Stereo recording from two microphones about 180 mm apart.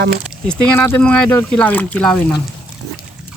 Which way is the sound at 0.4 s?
10° left (ahead or behind).